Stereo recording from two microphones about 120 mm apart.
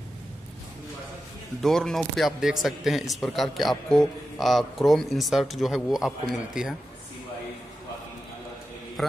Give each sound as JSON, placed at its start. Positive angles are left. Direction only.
{"t": 1.6, "sound": "speech", "side_deg": 5}